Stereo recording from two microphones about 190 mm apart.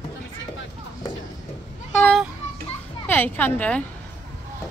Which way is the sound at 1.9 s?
10° left (ahead or behind).